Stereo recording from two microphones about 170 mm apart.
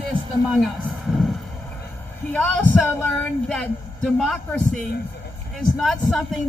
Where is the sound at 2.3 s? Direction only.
10° left (ahead or behind).